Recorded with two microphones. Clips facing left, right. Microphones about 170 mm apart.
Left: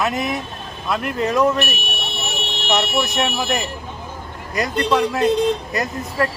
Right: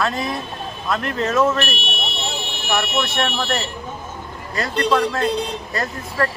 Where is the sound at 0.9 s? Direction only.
10° left (ahead or behind).